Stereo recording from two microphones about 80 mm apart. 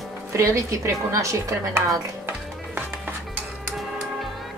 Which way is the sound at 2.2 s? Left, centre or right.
Right.